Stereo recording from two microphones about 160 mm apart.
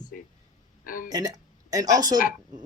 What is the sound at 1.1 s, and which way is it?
Speech, 25° right (ahead or behind).